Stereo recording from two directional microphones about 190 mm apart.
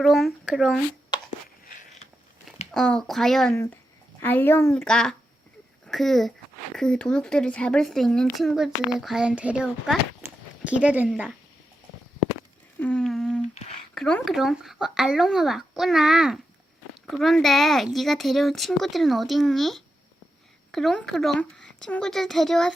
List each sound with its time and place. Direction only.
0.0 s speech: centre (ahead or behind)
1.6 s a sound: 40° left (ahead or behind)
2.7 s speech: 5° left (ahead or behind)
12.8 s humming: 5° left (ahead or behind)
13.5 s speech: 35° left (ahead or behind)
13.9 s speech: centre (ahead or behind)